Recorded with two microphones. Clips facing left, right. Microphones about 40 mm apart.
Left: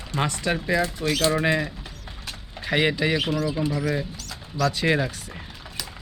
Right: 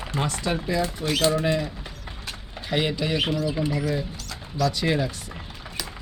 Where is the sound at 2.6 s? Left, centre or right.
Centre.